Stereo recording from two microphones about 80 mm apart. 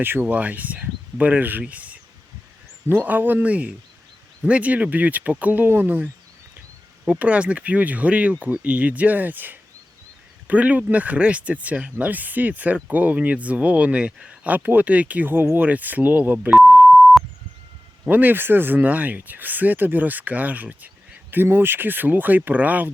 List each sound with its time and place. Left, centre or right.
0.0 s speech: right
7.1 s speech: centre
16.6 s beep: centre
18.1 s speech: right